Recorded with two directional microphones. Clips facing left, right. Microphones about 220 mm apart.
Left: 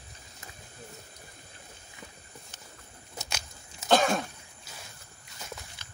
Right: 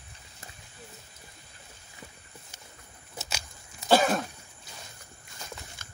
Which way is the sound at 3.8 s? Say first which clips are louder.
Right 1 dB; 5° right (ahead or behind).